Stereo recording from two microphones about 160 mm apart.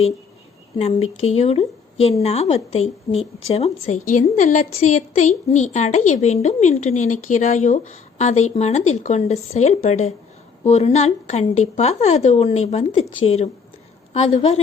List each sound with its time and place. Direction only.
0.8 s a woman's voice: 40° left (ahead or behind)